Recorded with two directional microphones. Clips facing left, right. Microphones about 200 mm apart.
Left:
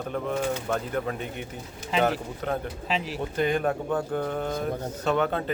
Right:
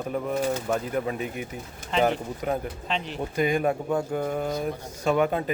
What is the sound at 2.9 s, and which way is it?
Speech, 5° left (ahead or behind).